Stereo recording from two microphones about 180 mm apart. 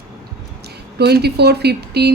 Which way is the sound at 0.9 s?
65° right (ahead or behind).